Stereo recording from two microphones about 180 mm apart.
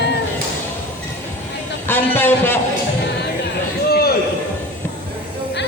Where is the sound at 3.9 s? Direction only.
60° left (ahead or behind).